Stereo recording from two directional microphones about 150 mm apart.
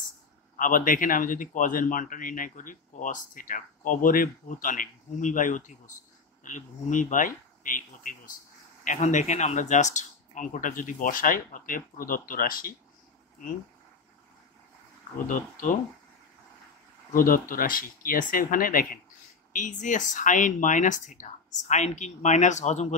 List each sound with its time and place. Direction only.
0.6 s speech: 65° left (ahead or behind)
8.8 s speech: 55° left (ahead or behind); by 12.7 s 70° left (ahead or behind)
15.2 s speech: 60° left (ahead or behind)
17.1 s speech: 70° left (ahead or behind)
19.5 s speech: 55° left (ahead or behind)